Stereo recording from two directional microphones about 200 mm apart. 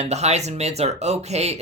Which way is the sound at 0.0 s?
35° right (ahead or behind).